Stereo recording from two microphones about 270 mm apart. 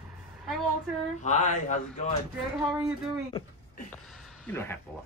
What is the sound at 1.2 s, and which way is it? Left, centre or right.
Speech, left.